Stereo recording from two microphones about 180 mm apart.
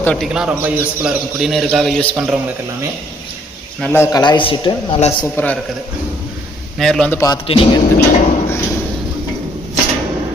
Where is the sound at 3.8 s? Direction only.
15° left (ahead or behind).